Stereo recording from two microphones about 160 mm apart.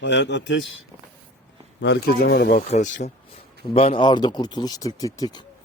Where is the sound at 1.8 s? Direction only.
80° left.